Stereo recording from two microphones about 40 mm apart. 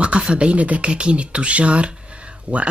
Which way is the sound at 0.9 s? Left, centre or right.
Right.